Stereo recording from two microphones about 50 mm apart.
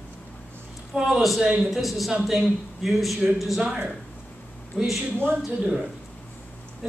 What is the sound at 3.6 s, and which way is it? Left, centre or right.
Speech, centre.